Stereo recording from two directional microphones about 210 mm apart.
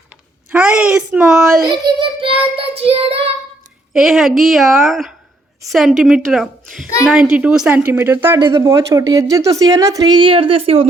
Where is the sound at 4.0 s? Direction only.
Centre (ahead or behind).